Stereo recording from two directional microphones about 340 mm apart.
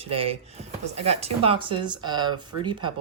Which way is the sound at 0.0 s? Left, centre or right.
Centre.